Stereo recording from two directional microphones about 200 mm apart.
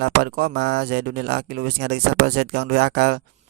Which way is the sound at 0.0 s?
50° right (ahead or behind).